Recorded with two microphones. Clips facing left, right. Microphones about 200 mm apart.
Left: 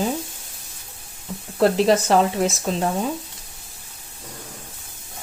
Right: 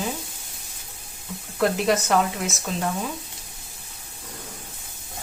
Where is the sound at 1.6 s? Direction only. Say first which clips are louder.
Left 5 dB; 30° left (ahead or behind).